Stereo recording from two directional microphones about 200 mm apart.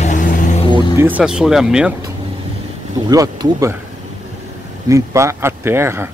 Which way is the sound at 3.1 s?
15° right (ahead or behind).